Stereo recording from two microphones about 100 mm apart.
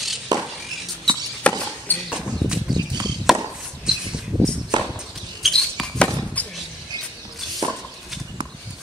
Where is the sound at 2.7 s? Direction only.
45° right (ahead or behind).